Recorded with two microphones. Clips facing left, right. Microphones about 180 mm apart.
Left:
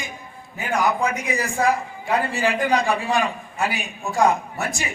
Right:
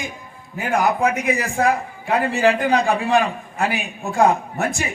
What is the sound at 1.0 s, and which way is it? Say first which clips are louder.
Speech: right 4 dB; 60° right (ahead or behind).